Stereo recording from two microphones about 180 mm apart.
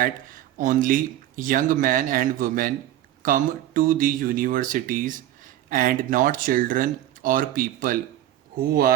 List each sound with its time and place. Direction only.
0.6 s speech: 50° right (ahead or behind)